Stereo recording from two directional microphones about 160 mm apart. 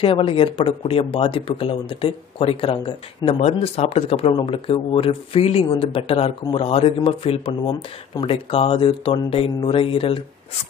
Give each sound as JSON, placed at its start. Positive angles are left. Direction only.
{"t": 0.0, "sound": "speech", "side_deg": 35}